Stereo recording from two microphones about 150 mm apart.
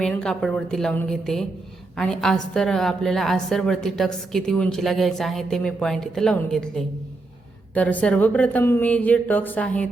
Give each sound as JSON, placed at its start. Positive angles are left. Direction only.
{"t": 0.0, "sound": "a woman's voice", "side_deg": 5}